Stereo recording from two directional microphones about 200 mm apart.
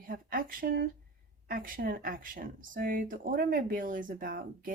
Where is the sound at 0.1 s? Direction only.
45° right (ahead or behind).